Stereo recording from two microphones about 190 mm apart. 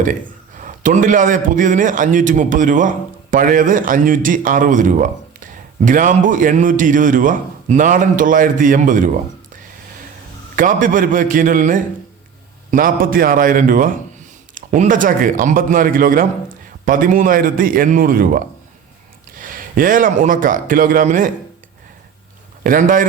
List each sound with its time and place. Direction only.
0.6 s a man's voice: 45° right (ahead or behind)
10.5 s a man's voice: 45° right (ahead or behind)
22.6 s a man's voice: 45° right (ahead or behind)